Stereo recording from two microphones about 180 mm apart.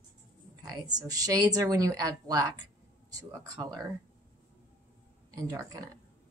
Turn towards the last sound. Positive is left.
turn(degrees=-20)  # may be behind; listen again after turning